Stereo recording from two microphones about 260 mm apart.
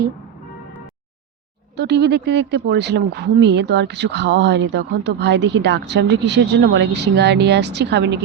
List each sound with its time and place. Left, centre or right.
1.7 s speech: right